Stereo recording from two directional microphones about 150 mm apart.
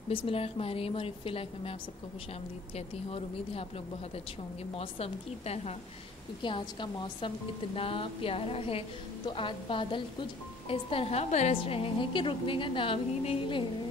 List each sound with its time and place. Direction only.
0.1 s a woman's voice: 40° left (ahead or behind)
3.1 s a woman's voice: 40° left (ahead or behind)
4.7 s a woman's voice: 40° left (ahead or behind)
6.4 s a woman's voice: 30° left (ahead or behind)